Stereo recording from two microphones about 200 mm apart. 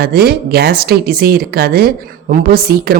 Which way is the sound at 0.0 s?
50° right (ahead or behind).